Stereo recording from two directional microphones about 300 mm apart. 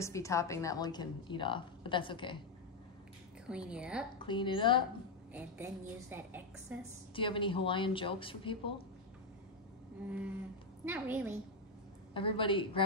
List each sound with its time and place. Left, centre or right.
0.0 s a woman's voice: centre
3.4 s a woman's voice: centre
4.2 s a woman's voice: centre
5.3 s a woman's voice: centre
7.2 s a woman's voice: centre
10.0 s a woman's voice: centre
12.1 s a woman's voice: centre